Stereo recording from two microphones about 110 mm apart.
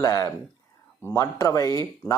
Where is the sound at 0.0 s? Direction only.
30° left (ahead or behind).